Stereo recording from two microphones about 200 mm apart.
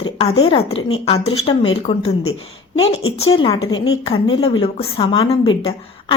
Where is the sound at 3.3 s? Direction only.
20° left (ahead or behind).